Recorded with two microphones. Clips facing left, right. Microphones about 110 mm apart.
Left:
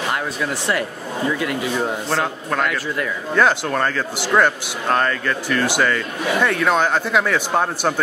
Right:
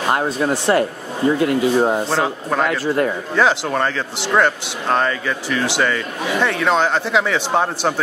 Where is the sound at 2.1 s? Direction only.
5° right (ahead or behind).